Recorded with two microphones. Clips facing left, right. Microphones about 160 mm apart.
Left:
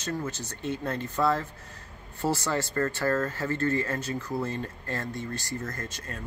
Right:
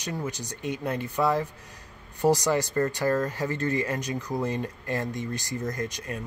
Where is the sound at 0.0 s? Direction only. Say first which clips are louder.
Even; 15° right (ahead or behind).